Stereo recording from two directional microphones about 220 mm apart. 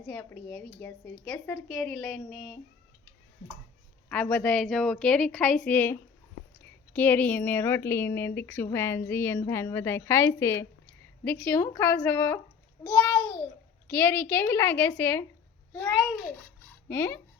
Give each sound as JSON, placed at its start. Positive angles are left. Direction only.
{"t": 0.1, "sound": "a woman's voice", "side_deg": 10}
{"t": 4.1, "sound": "a woman's voice", "side_deg": 5}